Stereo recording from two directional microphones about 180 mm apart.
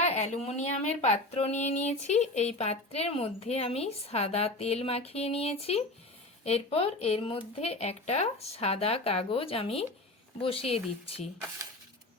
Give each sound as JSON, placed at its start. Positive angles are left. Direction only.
{"t": 0.0, "sound": "speech", "side_deg": 40}